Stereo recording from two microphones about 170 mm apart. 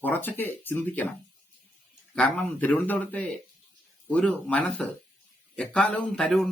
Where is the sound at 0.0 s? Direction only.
10° left (ahead or behind).